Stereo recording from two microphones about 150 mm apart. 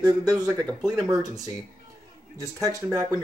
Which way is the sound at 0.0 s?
25° right (ahead or behind).